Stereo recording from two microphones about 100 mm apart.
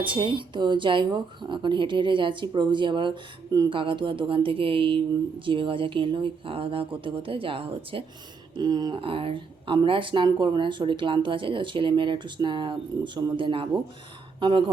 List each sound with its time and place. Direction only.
0.0 s speech: 55° right (ahead or behind)
8.5 s speech: 45° right (ahead or behind)
9.0 s speech: 65° right (ahead or behind)